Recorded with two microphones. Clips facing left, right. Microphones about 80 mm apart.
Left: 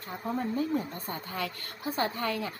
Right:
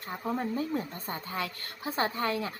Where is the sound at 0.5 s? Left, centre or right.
Right.